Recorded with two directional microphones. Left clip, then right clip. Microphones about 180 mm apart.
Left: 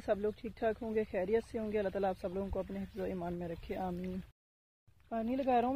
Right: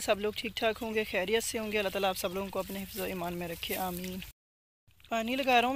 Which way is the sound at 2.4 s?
20° right (ahead or behind).